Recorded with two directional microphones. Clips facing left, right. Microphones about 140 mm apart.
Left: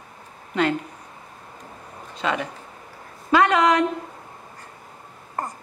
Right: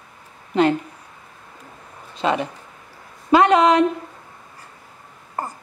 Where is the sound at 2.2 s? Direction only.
25° right (ahead or behind).